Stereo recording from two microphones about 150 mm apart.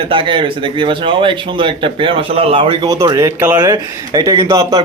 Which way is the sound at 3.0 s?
20° right (ahead or behind).